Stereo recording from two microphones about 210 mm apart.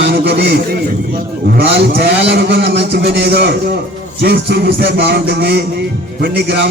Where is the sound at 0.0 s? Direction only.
50° right (ahead or behind).